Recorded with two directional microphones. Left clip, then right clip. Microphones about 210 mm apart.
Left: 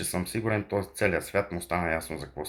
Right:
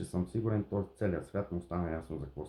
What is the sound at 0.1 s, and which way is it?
Speech, 15° left (ahead or behind).